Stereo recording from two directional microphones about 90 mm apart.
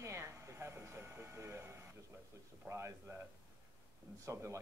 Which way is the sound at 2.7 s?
30° right (ahead or behind).